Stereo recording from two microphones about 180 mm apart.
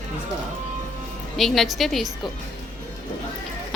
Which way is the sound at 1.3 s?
Centre (ahead or behind).